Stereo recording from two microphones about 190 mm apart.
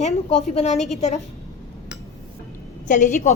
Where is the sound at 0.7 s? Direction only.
Centre (ahead or behind).